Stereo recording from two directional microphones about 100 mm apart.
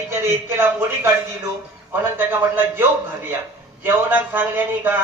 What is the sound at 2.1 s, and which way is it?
Speech, 20° right (ahead or behind).